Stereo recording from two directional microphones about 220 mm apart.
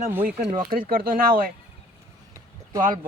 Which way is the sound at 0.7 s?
40° right (ahead or behind).